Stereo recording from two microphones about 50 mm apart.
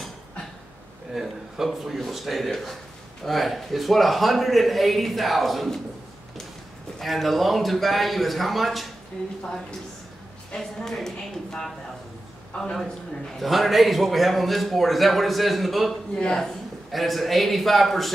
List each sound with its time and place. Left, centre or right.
1.1 s speech: centre
7.0 s speech: centre
10.5 s a woman's voice: centre
12.5 s a man's voice: left
13.4 s speech: centre
15.9 s a woman's voice: centre
16.9 s speech: centre